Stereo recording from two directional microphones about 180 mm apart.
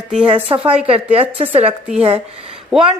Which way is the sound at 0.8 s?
30° right (ahead or behind).